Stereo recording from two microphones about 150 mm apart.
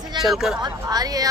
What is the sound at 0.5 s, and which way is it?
Speech, 25° right (ahead or behind).